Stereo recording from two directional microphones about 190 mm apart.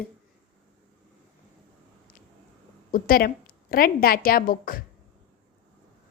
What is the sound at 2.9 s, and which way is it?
A woman's voice, 50° left (ahead or behind).